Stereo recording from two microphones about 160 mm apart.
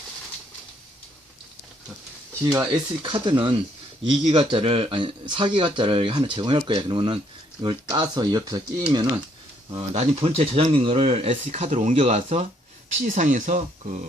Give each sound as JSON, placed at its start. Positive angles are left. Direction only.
{"t": 2.6, "sound": "speech", "side_deg": -30}
{"t": 9.9, "sound": "speech", "side_deg": -40}